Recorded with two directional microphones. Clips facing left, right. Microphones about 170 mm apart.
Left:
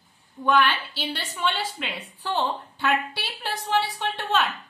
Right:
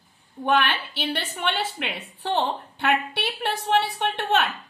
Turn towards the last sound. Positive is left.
turn(degrees=-60)  # may be behind; listen again after turning